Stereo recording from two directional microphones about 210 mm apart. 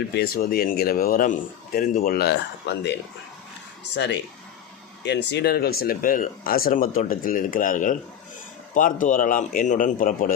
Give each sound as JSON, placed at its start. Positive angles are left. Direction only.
{"t": 0.1, "sound": "speech", "side_deg": 50}
{"t": 3.9, "sound": "a man's voice", "side_deg": 55}